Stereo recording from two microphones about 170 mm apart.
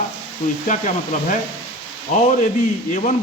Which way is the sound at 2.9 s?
50° left (ahead or behind).